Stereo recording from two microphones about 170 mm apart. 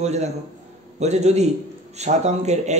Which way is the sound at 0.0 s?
40° right (ahead or behind).